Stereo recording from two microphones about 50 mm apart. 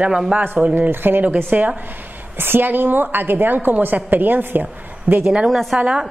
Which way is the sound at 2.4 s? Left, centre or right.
Right.